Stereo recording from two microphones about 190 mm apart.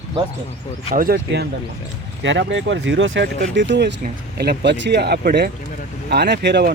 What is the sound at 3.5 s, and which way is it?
Speech, 70° right (ahead or behind).